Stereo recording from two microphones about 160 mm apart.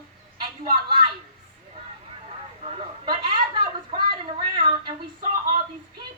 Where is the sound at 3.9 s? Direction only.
30° right (ahead or behind).